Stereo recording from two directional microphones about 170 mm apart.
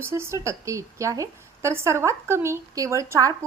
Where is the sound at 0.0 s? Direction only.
15° right (ahead or behind).